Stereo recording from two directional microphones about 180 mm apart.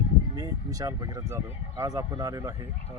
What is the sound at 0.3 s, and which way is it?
Speech, 20° right (ahead or behind).